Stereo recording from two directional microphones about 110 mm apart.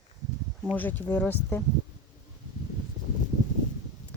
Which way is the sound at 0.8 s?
15° left (ahead or behind).